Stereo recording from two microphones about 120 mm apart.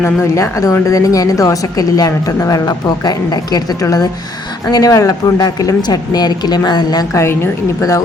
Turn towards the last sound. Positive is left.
turn(degrees=20)  # may be behind; listen again after turning